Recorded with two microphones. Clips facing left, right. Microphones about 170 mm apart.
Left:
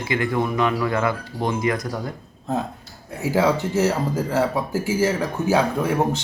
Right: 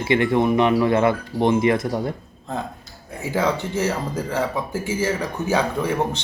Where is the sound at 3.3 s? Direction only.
5° left (ahead or behind).